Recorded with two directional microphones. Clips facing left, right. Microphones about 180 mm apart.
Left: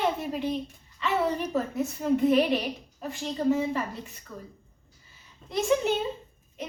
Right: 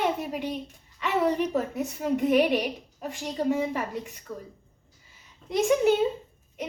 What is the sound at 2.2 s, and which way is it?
A woman's voice, 15° right (ahead or behind).